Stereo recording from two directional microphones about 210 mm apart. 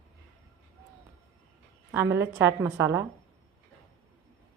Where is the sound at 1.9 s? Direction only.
10° right (ahead or behind).